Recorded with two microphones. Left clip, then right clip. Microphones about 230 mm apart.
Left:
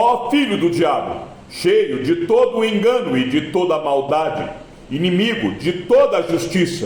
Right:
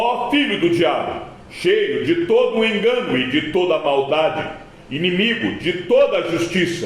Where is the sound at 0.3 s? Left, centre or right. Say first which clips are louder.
Even; left.